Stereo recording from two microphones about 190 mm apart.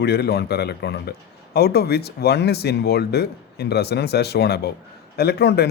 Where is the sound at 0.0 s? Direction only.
60° left (ahead or behind).